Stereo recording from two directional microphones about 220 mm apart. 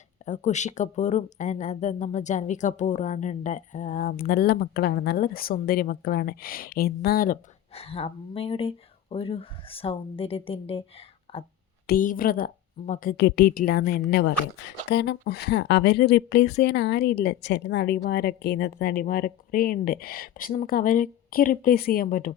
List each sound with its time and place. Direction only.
0.3 s speech: 30° left (ahead or behind)
7.8 s speech: 25° left (ahead or behind)
11.9 s a woman's voice: 40° left (ahead or behind)